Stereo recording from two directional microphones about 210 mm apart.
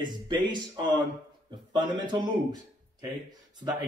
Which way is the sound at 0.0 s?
20° right (ahead or behind).